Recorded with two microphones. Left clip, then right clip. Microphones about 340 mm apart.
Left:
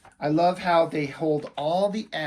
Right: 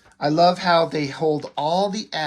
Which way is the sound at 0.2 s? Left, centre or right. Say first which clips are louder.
Right 5 dB; centre.